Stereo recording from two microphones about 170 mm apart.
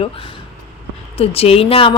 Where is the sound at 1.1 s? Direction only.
35° left (ahead or behind).